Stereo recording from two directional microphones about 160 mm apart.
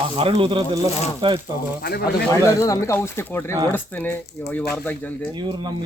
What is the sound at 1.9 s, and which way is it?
Speech, 80° left.